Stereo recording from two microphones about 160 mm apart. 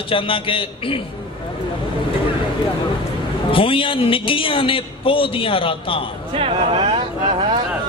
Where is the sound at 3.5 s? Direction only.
35° left (ahead or behind).